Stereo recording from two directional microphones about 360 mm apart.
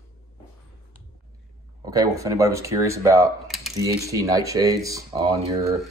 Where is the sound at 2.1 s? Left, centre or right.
Centre.